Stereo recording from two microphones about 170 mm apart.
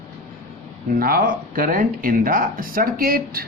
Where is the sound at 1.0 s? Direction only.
60° right (ahead or behind).